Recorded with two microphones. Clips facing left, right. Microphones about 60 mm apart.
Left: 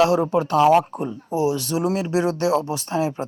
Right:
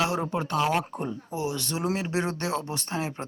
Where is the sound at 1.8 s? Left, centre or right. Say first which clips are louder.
Left 5 dB; centre.